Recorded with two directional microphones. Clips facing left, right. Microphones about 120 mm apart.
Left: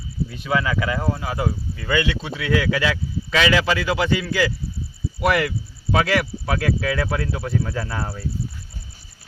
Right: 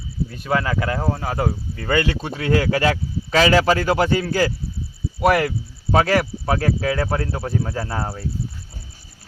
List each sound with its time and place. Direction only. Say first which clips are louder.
0.3 s speech: right 1 dB; 45° right (ahead or behind)